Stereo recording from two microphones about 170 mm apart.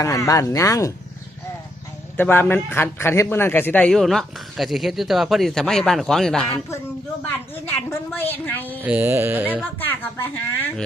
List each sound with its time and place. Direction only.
0.0 s speech: 20° left (ahead or behind)
2.1 s a man's voice: 10° left (ahead or behind)
7.7 s a woman's voice: 10° left (ahead or behind)
8.8 s speech: 10° right (ahead or behind)
9.7 s a woman's voice: 10° left (ahead or behind)